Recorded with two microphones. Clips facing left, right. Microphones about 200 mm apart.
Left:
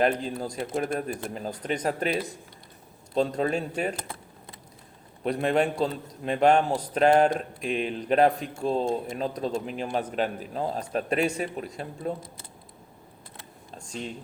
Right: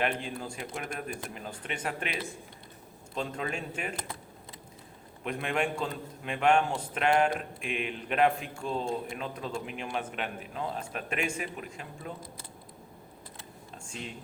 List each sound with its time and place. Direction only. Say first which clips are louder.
0.0 s a man's voice: left 7 dB; 40° left (ahead or behind)
5.2 s a man's voice: left 7 dB; 35° left (ahead or behind)
13.7 s a sound: left 6 dB; 35° left (ahead or behind)